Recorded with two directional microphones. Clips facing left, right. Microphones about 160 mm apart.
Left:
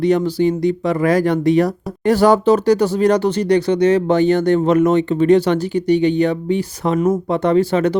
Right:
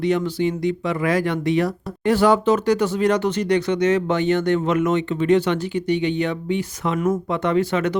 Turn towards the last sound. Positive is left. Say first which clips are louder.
# left 5 dB
turn(degrees=35)  # may be behind; listen again after turning